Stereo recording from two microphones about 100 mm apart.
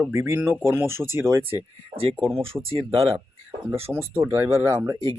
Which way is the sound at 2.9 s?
65° right (ahead or behind).